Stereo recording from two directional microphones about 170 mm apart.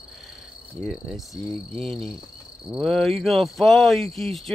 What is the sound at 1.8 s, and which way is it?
Speech, 35° right (ahead or behind).